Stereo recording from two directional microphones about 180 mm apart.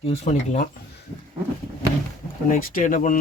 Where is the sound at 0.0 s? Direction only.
35° left (ahead or behind).